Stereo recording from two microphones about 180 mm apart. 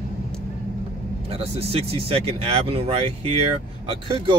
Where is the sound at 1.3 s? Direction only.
30° right (ahead or behind).